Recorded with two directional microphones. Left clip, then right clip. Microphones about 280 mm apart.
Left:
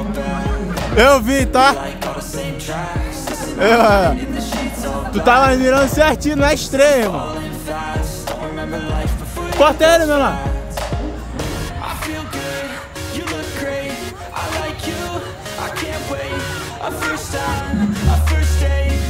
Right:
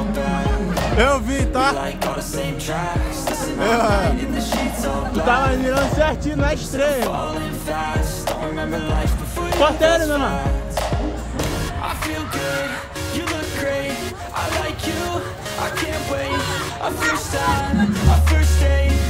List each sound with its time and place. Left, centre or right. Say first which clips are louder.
0.1 s music: right 1 dB; centre
0.9 s speech: left 8 dB; left
1.8 s music: right 1 dB; centre
3.6 s speech: left 7 dB; left
4.4 s music: right 1 dB; centre
5.2 s speech: left 7 dB; left
7.7 s music: right 1 dB; centre
9.6 s speech: left 5 dB; left
10.3 s music: right 1 dB; centre
13.3 s music: even; centre